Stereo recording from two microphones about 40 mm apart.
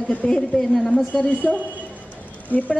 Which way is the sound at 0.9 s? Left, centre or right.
Left.